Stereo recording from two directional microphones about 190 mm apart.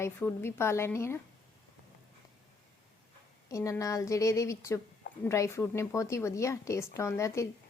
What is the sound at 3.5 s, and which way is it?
A woman's voice, 15° left (ahead or behind).